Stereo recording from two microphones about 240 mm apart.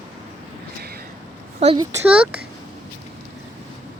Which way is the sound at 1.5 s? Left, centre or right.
Right.